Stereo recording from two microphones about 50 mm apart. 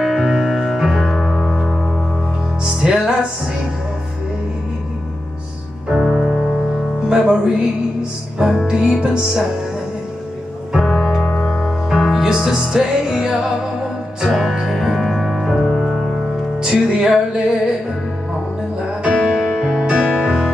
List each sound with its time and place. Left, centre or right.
0.0 s music: centre
2.6 s music: centre
5.9 s music: centre
10.7 s music: centre
16.5 s music: centre
19.1 s music: centre